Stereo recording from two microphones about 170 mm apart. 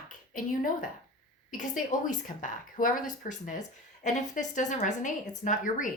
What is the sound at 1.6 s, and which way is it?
Speech, 50° left (ahead or behind).